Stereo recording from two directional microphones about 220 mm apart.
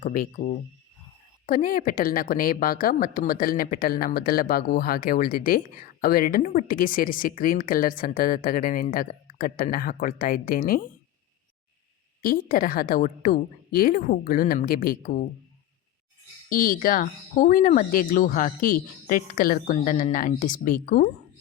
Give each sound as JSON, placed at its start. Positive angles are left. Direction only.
{"t": 0.0, "sound": "speech", "side_deg": 35}
{"t": 12.2, "sound": "speech", "side_deg": 40}
{"t": 16.5, "sound": "speech", "side_deg": 40}